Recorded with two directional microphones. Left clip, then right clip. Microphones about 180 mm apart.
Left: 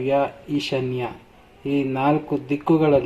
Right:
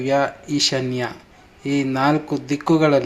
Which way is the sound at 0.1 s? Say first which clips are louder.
Right 2 dB; 20° right (ahead or behind).